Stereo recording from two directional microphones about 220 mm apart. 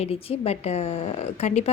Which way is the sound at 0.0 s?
25° left (ahead or behind).